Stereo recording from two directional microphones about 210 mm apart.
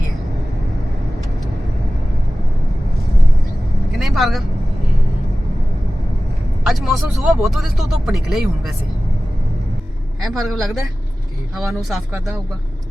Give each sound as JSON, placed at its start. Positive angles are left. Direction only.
{"t": 3.9, "sound": "vehicle", "side_deg": 0}
{"t": 6.7, "sound": "speech", "side_deg": 0}
{"t": 10.2, "sound": "speech", "side_deg": 0}